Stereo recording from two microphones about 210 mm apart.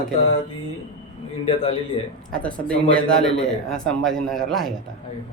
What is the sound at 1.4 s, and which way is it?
Speech, 25° left (ahead or behind).